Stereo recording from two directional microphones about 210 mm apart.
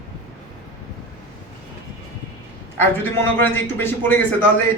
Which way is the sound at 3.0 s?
10° left (ahead or behind).